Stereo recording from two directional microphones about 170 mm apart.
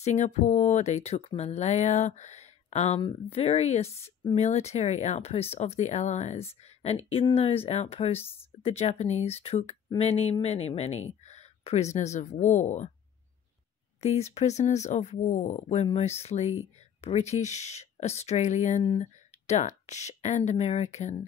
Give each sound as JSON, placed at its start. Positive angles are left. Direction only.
{"t": 0.0, "sound": "speech", "side_deg": 40}
{"t": 14.0, "sound": "speech", "side_deg": 40}